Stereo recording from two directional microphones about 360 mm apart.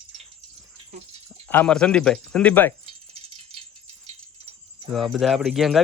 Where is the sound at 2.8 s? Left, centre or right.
Centre.